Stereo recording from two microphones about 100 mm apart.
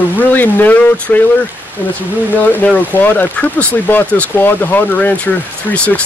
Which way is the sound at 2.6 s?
15° left (ahead or behind).